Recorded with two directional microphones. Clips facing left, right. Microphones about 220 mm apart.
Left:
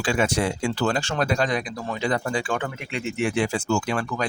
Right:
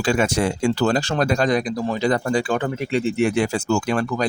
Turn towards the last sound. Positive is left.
turn(degrees=-40)  # may be behind; listen again after turning